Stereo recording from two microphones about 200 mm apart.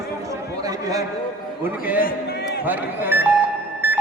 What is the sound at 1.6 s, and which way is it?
Speech, 10° right (ahead or behind).